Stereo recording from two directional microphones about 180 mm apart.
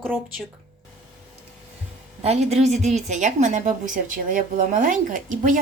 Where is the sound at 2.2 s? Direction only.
35° right (ahead or behind).